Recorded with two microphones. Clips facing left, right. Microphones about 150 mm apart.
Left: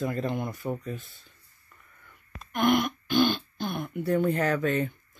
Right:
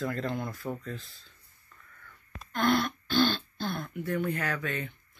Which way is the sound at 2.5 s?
15° left (ahead or behind).